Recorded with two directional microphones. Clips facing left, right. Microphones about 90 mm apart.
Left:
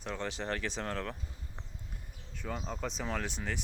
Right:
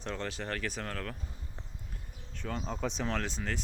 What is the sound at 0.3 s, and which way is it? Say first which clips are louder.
Speech: left 1 dB; 25° left (ahead or behind).